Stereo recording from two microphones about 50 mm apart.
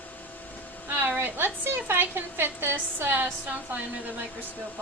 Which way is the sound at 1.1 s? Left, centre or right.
Right.